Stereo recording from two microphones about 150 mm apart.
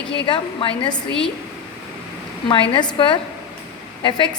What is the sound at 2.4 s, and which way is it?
A woman's voice, 30° left (ahead or behind).